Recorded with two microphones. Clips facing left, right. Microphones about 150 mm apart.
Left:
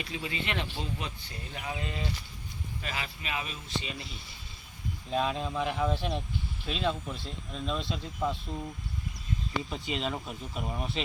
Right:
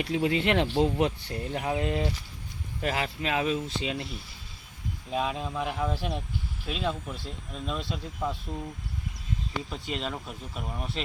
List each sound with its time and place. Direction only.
0.0 s speech: 70° right (ahead or behind)
2.8 s speech: 65° right (ahead or behind)
5.1 s speech: 5° right (ahead or behind)
9.6 s speech: centre (ahead or behind)